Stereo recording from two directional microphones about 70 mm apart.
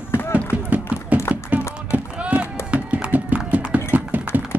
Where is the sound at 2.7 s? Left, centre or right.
Centre.